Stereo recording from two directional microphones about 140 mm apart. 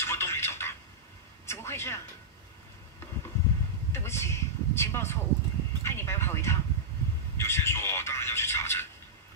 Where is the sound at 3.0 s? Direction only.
20° left (ahead or behind).